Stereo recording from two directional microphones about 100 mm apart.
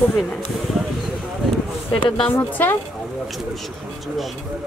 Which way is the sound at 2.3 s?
20° left (ahead or behind).